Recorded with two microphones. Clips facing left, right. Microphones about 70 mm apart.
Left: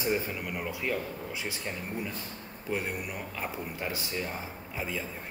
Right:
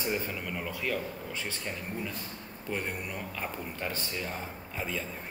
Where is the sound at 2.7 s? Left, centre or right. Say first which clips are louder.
Left 2 dB; centre.